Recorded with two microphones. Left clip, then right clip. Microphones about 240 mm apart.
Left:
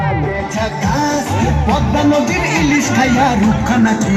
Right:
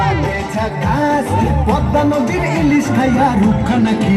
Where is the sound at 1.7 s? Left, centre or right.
Right.